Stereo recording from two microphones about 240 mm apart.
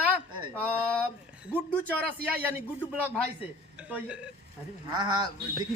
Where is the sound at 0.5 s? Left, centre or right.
Centre.